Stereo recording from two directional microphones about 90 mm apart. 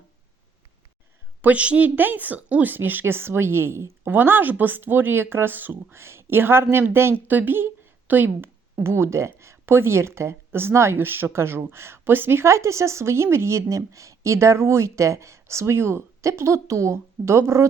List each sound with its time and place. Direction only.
1.4 s a woman's voice: 15° right (ahead or behind); by 17.7 s 30° right (ahead or behind)